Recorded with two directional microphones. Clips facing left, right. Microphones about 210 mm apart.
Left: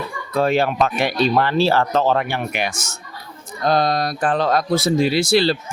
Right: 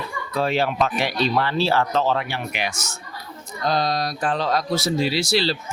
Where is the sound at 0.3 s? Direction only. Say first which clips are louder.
Left 4 dB; 50° left (ahead or behind).